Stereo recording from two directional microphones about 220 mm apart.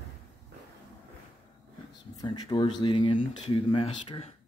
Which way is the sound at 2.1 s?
20° left (ahead or behind).